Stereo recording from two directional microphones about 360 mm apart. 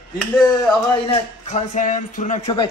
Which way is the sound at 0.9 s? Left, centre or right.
Centre.